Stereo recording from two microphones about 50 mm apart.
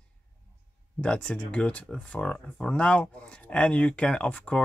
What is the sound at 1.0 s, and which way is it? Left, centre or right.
Speech, left.